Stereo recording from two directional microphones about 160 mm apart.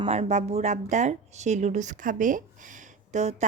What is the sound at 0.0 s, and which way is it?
Speech, 40° right (ahead or behind).